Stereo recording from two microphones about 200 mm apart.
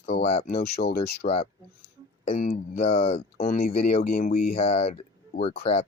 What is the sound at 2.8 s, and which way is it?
Speech, 30° left (ahead or behind).